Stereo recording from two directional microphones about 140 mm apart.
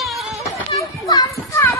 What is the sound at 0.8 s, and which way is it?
Children playing, 25° left (ahead or behind).